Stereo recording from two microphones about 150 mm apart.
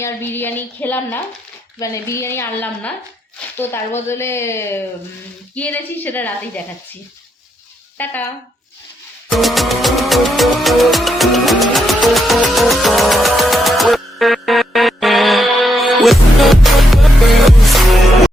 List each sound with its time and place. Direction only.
0.0 s a woman's voice: 15° left (ahead or behind)
9.3 s music: centre (ahead or behind)